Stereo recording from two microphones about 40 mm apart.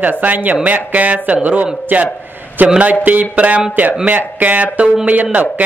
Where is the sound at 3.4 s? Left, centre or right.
Right.